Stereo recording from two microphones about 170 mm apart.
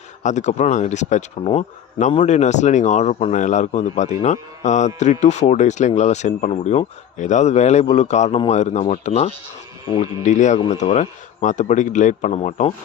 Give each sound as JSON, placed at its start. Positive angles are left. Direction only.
{"t": 0.2, "sound": "speech", "side_deg": 45}
{"t": 10.2, "sound": "speech", "side_deg": 45}